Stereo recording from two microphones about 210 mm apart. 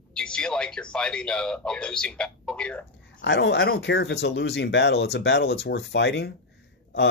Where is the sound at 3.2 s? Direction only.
55° left (ahead or behind).